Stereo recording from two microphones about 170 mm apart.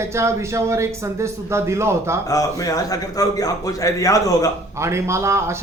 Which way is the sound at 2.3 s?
20° left (ahead or behind).